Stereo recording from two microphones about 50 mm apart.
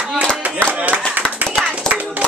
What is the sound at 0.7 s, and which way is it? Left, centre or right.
Clapping, right.